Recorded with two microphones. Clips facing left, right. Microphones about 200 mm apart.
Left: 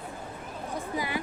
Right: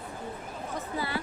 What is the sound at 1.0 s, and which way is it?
Speech, 15° left (ahead or behind).